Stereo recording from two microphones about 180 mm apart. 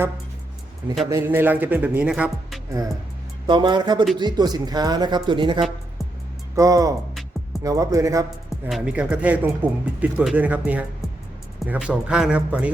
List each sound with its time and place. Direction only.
1.1 s speech: 10° right (ahead or behind)
3.4 s speech: 25° right (ahead or behind)
8.4 s speech: 5° right (ahead or behind)